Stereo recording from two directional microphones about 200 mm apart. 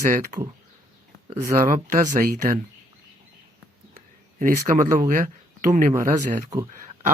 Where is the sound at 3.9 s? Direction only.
40° right (ahead or behind).